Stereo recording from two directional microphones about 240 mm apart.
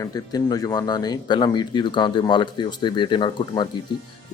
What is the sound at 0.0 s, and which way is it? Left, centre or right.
Speech, centre.